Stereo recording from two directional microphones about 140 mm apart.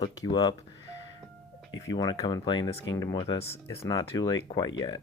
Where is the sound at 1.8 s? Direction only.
30° left (ahead or behind).